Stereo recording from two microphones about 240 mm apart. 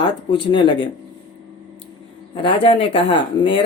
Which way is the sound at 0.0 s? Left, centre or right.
Centre.